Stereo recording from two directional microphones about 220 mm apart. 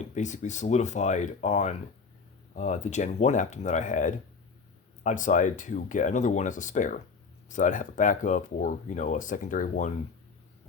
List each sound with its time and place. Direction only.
0.1 s speech: 35° left (ahead or behind)